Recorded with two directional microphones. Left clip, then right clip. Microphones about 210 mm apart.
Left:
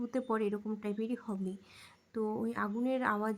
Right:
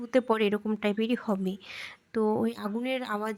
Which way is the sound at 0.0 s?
30° right (ahead or behind).